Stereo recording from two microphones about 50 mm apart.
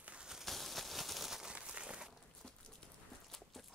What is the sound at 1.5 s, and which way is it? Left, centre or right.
Crumpling, right.